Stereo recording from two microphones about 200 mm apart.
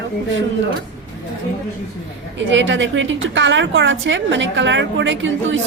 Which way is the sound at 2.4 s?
70° right (ahead or behind).